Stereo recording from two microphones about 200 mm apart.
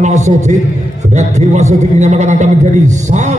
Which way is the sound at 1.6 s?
35° right (ahead or behind).